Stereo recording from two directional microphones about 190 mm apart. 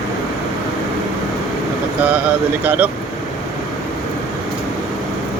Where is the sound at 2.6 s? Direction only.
10° right (ahead or behind).